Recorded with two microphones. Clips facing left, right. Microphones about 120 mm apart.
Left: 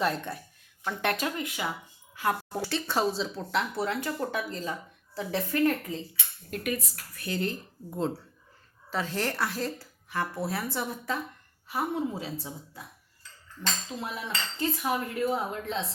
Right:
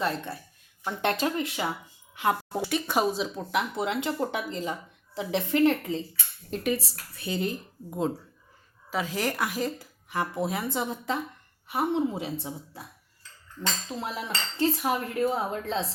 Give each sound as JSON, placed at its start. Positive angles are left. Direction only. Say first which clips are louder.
{"t": 0.0, "sound": "a woman's voice", "louder": "left 1 dB", "side_deg": 0}
{"t": 0.9, "sound": "a woman's voice", "louder": "right 2 dB", "side_deg": -25}
{"t": 13.6, "sound": "cutlery", "louder": "right 2 dB", "side_deg": -30}